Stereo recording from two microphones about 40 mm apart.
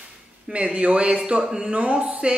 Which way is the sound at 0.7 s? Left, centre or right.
Right.